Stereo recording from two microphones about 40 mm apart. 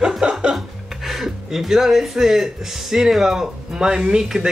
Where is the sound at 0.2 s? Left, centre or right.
Centre.